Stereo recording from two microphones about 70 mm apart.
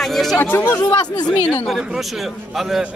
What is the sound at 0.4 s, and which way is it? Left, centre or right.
Speech, left.